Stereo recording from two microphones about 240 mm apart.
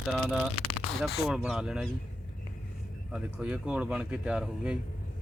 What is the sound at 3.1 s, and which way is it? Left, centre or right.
A man's voice, centre.